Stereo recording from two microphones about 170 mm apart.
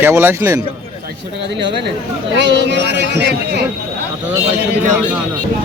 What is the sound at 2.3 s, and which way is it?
Speech, 90° right.